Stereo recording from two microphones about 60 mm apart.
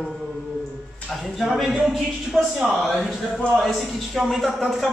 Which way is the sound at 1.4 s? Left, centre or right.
Centre.